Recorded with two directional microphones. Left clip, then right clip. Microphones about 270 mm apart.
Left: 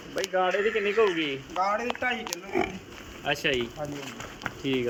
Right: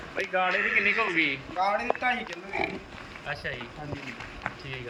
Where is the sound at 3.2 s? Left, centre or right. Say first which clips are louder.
Left 7 dB; left.